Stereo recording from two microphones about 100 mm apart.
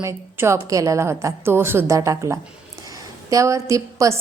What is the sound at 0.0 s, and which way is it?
A woman's voice, 30° right (ahead or behind).